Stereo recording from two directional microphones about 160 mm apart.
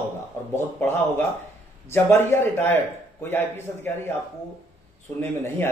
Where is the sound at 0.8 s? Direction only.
10° left (ahead or behind).